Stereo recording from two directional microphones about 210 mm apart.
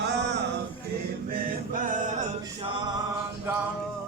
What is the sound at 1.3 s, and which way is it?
Chant, 40° right (ahead or behind).